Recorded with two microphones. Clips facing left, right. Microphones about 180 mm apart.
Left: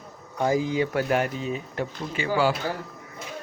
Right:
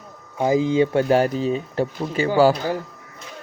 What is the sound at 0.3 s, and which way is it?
Speech, 20° right (ahead or behind).